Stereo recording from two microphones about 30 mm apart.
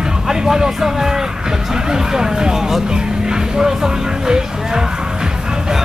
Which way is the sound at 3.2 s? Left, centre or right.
Right.